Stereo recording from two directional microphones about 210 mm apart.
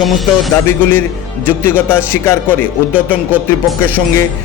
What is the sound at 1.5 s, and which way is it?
A man's voice, 10° left (ahead or behind).